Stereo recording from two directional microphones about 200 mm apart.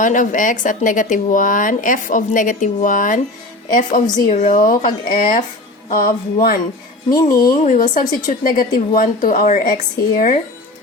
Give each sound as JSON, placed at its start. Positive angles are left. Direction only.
{"t": 0.0, "sound": "speech", "side_deg": 40}
{"t": 7.1, "sound": "speech", "side_deg": 20}
{"t": 7.6, "sound": "speech", "side_deg": 40}